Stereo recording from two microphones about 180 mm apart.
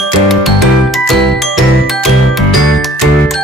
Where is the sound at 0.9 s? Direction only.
Centre (ahead or behind).